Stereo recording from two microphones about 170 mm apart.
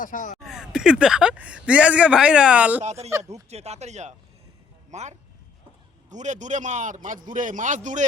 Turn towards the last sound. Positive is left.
turn(degrees=-45)  # may be behind; listen again after turning